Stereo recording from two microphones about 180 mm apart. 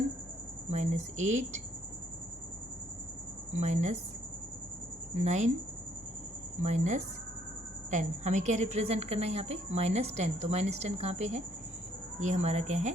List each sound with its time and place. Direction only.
0.7 s a woman's voice: 40° right (ahead or behind)
3.6 s a woman's voice: 40° right (ahead or behind)
5.1 s a woman's voice: 40° right (ahead or behind)
6.6 s a woman's voice: 40° right (ahead or behind)